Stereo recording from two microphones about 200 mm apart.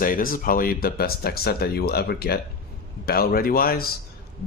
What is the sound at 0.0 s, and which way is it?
Speech, 45° left (ahead or behind).